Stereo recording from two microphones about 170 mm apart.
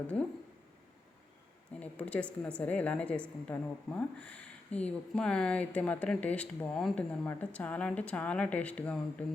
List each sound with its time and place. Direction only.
1.8 s a woman's voice: 10° left (ahead or behind)